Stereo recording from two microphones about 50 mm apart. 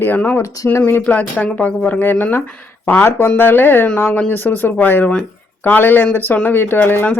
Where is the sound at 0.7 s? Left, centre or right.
Left.